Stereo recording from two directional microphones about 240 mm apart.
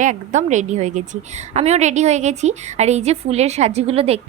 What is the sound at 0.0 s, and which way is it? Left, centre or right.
A woman's voice, right.